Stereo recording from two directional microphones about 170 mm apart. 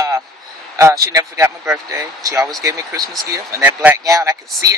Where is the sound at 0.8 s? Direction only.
20° right (ahead or behind).